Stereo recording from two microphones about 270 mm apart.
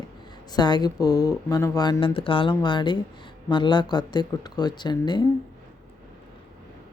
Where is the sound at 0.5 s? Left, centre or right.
Centre.